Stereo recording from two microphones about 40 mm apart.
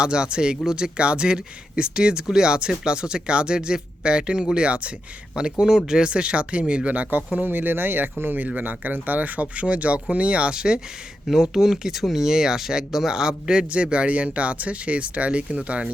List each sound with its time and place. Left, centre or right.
0.0 s speech: right
7.3 s speech: right
10.5 s speech: centre